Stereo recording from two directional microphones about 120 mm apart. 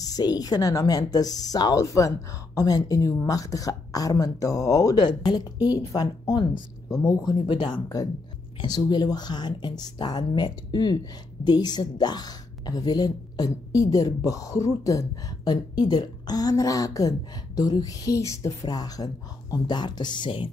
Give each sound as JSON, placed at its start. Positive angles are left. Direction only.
{"t": 0.0, "sound": "a woman's voice", "side_deg": 30}
{"t": 7.2, "sound": "a woman's voice", "side_deg": 40}